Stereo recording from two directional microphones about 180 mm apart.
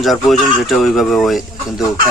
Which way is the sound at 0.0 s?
Centre (ahead or behind).